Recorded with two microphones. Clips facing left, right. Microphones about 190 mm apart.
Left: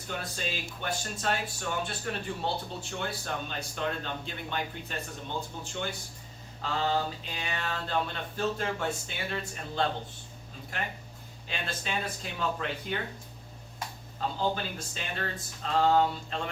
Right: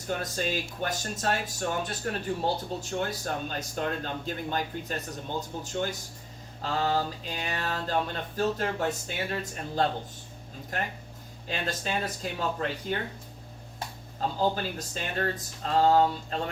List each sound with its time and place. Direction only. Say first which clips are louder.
0.2 s speech: right 5 dB; 45° right (ahead or behind)
7.3 s speech: right 3 dB; 40° right (ahead or behind)
11.4 s speech: right 4 dB; 40° right (ahead or behind)